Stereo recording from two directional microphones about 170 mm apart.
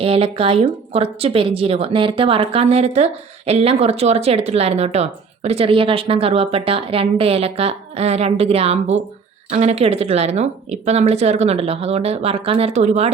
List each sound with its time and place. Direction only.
0.0 s a woman's voice: 35° right (ahead or behind)